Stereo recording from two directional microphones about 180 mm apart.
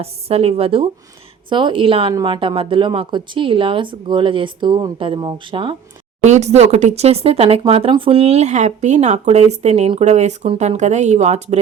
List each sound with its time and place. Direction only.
0.0 s speech: 35° right (ahead or behind)
6.2 s speech: 40° right (ahead or behind)